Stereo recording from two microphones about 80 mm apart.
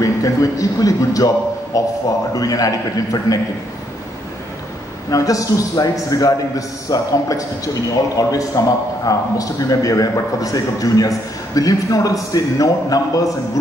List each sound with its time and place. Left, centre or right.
0.0 s a man's voice: left
5.1 s a man's voice: left